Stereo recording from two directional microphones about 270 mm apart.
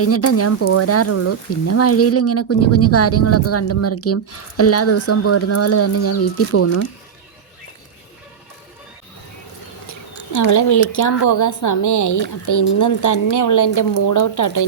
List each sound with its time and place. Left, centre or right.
0.0 s speech: left
10.3 s speech: left